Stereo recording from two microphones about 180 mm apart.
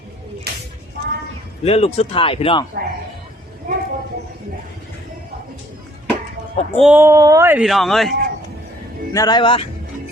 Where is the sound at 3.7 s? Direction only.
50° right (ahead or behind).